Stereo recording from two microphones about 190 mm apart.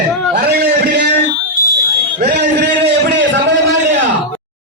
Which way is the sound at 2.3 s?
60° right (ahead or behind).